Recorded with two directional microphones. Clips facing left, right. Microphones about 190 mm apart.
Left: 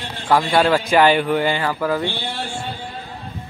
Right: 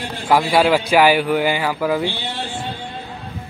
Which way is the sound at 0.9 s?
5° right (ahead or behind).